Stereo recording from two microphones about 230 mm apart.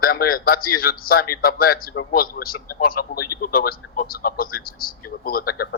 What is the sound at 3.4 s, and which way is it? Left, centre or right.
A man's voice, left.